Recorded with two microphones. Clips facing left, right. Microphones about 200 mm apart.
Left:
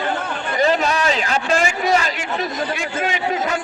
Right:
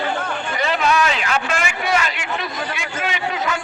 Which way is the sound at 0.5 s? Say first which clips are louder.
Left 2 dB; 40° left (ahead or behind).